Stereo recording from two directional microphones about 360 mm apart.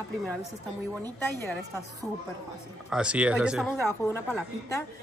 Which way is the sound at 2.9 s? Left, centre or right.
Centre.